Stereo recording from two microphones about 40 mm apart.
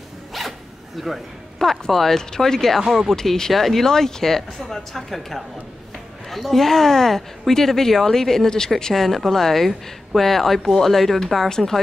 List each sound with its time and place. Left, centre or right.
0.3 s speech: centre